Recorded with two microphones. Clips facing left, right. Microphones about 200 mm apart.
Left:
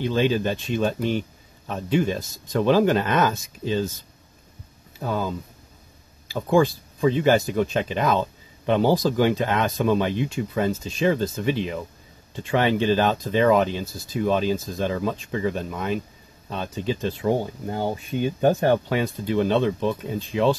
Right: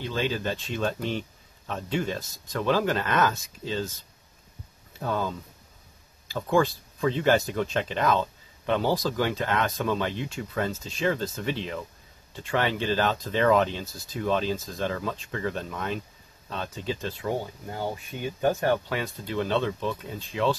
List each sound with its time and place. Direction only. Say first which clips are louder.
0.0 s speech: left 7 dB; 20° left (ahead or behind)
4.9 s speech: left 2 dB; 10° left (ahead or behind)